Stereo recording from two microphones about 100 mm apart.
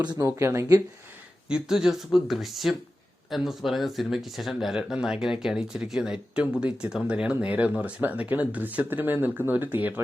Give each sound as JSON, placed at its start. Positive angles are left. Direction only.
{"t": 0.0, "sound": "speech", "side_deg": -45}
{"t": 0.3, "sound": "speech", "side_deg": -25}
{"t": 1.5, "sound": "speech", "side_deg": -5}